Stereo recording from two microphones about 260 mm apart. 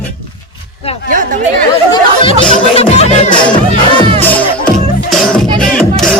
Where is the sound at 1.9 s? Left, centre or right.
Centre.